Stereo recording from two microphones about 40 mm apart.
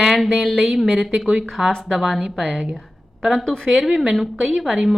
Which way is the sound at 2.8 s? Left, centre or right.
Centre.